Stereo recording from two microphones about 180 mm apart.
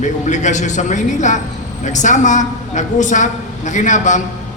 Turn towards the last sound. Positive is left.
turn(degrees=45)  # may be behind; listen again after turning